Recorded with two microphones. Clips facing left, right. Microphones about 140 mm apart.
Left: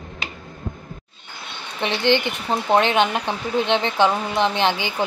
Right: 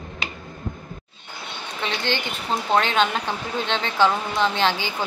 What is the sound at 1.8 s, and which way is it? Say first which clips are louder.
Speech: left 7 dB; 20° left (ahead or behind).